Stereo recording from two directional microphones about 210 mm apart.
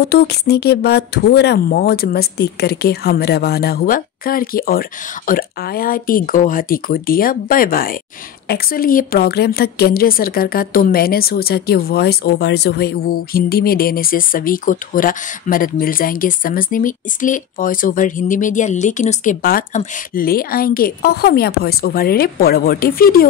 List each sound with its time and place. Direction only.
0.0 s a woman's voice: 50° left (ahead or behind)